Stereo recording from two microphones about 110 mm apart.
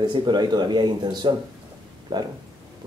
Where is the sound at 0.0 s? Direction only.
40° right (ahead or behind).